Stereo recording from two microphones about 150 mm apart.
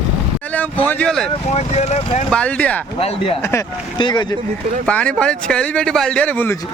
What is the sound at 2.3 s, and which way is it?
Speech, 10° left (ahead or behind).